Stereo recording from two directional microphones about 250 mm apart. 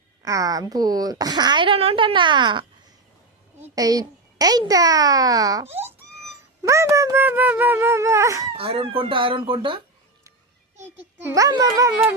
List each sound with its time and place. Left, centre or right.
0.2 s speech: centre
11.2 s speech: centre